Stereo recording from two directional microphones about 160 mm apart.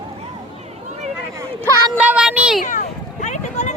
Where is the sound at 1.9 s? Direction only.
5° right (ahead or behind).